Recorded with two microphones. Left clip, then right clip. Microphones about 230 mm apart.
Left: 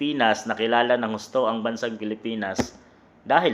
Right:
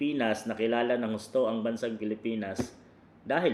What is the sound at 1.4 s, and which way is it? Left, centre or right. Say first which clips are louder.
Speech: left 6 dB; left.